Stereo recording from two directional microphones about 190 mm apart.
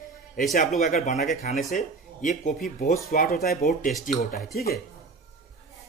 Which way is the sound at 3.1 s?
55° left (ahead or behind).